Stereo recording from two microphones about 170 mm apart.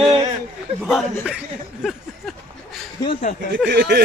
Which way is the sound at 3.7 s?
75° right (ahead or behind).